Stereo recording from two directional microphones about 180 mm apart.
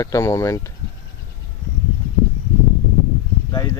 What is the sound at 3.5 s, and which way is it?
Speech, 20° left (ahead or behind).